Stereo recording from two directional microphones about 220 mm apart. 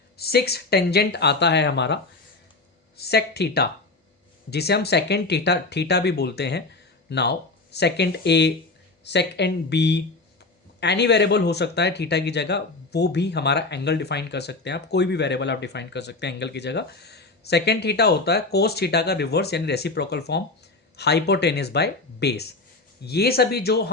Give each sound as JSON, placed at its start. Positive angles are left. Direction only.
{"t": 0.2, "sound": "speech", "side_deg": 45}
{"t": 3.0, "sound": "speech", "side_deg": 45}